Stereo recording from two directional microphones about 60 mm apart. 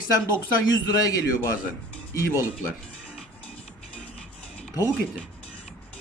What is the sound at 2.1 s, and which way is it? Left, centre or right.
Speech, left.